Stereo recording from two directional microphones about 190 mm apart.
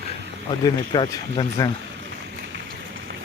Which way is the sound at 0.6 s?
25° left (ahead or behind).